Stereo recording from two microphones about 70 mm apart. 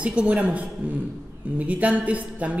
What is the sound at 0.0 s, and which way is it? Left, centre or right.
A woman's voice, centre.